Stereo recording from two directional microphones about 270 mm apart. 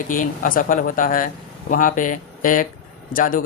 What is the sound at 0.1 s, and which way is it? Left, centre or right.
Speech, left.